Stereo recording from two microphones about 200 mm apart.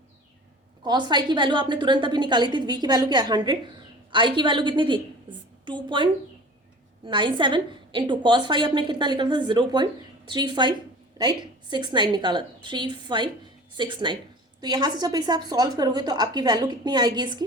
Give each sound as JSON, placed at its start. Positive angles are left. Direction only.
{"t": 0.8, "sound": "a woman's voice", "side_deg": -20}